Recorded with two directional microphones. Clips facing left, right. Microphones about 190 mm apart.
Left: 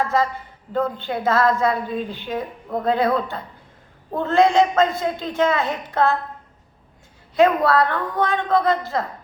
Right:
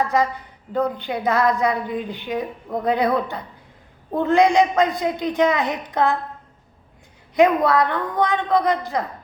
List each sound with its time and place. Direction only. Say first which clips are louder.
0.0 s a sound: right 1 dB; 15° right (ahead or behind)
0.7 s a man's voice: right 1 dB; 15° right (ahead or behind)
7.3 s a man's voice: even; 20° right (ahead or behind)